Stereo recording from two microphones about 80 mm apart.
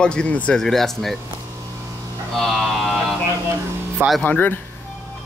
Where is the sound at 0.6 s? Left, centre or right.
Centre.